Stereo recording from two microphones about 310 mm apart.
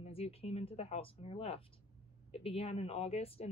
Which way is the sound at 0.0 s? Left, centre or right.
Centre.